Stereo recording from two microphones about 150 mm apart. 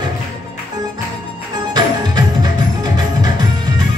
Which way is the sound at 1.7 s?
25° right (ahead or behind).